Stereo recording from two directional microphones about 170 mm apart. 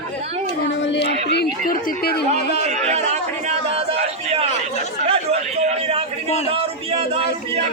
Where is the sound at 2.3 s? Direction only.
40° right (ahead or behind).